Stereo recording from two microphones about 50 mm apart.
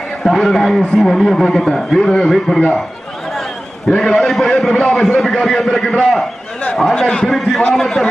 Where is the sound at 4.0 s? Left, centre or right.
Centre.